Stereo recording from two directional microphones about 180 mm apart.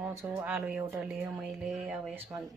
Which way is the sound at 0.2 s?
10° right (ahead or behind).